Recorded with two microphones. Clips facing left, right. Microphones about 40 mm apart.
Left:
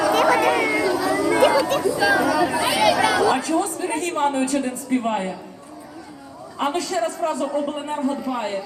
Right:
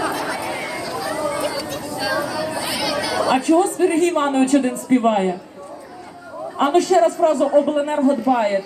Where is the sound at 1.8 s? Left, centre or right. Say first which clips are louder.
Left 5 dB; left.